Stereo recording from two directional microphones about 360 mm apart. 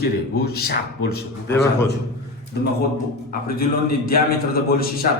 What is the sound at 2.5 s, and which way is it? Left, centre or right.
A man's voice, left.